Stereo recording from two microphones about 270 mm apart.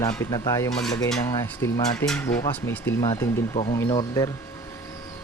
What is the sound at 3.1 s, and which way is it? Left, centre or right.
Speech, left.